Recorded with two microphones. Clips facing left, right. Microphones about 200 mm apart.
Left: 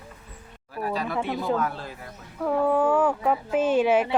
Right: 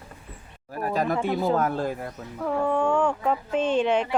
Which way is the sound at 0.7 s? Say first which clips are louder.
Right 3 dB; 45° right (ahead or behind).